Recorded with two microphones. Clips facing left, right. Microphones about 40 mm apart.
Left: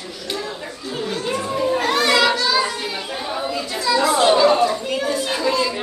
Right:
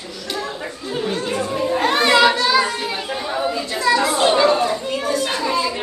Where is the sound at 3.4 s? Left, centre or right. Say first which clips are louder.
Right 2 dB; right.